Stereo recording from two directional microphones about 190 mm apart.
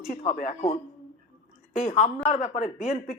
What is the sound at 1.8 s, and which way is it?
Speech, 30° left (ahead or behind).